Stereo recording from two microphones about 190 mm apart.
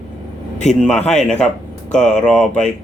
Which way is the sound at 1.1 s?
5° left (ahead or behind).